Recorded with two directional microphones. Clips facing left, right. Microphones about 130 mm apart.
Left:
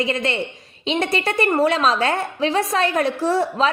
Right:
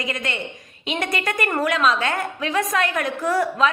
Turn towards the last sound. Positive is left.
turn(degrees=30)  # may be behind; listen again after turning